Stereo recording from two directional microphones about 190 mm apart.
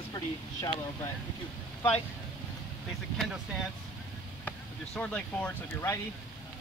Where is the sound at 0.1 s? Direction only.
20° left (ahead or behind).